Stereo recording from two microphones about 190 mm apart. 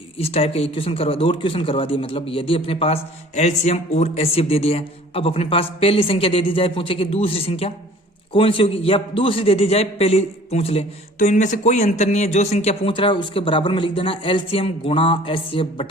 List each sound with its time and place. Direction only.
0.2 s a man's voice: 30° left (ahead or behind)